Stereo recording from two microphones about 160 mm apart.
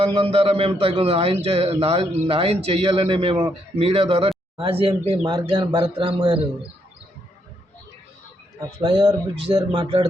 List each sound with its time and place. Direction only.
0.0 s a man's voice: 35° right (ahead or behind)
8.8 s a man's voice: 30° right (ahead or behind)